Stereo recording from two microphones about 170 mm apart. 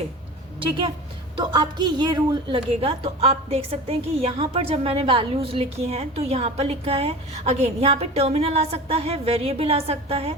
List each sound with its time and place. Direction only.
0.6 s a woman's voice: 30° right (ahead or behind)